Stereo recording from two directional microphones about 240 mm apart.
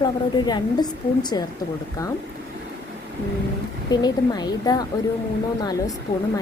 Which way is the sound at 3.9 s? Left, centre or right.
Centre.